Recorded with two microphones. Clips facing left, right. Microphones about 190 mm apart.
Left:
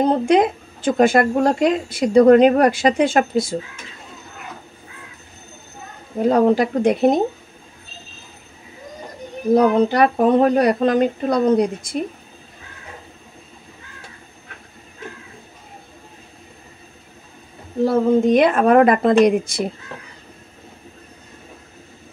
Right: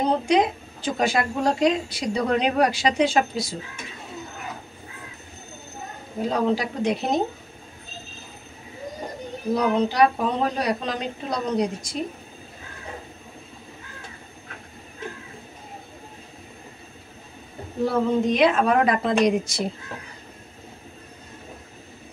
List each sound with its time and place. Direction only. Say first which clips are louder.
0.3 s a woman's voice: left 5 dB; 55° left (ahead or behind)
6.2 s a woman's voice: left 8 dB; 55° left (ahead or behind)
9.5 s a woman's voice: left 7 dB; 50° left (ahead or behind)
17.8 s a woman's voice: left 6 dB; 50° left (ahead or behind)